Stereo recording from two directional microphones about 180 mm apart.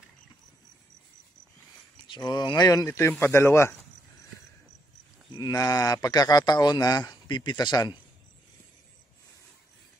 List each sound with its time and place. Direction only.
2.0 s speech: 25° left (ahead or behind)
5.3 s speech: 20° left (ahead or behind)